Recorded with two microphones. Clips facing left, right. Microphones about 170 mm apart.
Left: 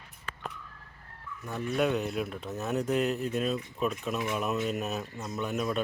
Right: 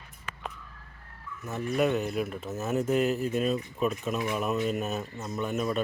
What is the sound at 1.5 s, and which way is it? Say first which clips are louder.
Speech: right 2 dB; 5° right (ahead or behind).